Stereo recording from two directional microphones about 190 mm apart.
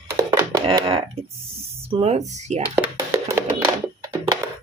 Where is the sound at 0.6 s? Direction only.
30° right (ahead or behind).